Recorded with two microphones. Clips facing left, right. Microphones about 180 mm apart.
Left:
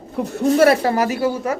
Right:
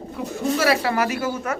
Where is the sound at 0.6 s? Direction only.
50° left (ahead or behind).